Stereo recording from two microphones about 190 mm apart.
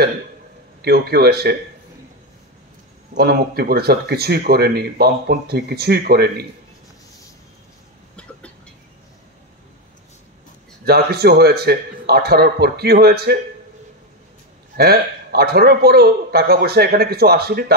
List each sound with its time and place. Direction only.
0.8 s speech: 55° right (ahead or behind)
3.2 s speech: 55° right (ahead or behind)
10.9 s speech: 55° right (ahead or behind)
14.8 s speech: 55° right (ahead or behind)